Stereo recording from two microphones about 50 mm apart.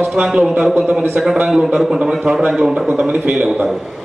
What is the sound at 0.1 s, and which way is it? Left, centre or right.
Speech, centre.